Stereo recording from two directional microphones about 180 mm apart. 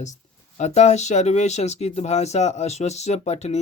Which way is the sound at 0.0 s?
40° left (ahead or behind).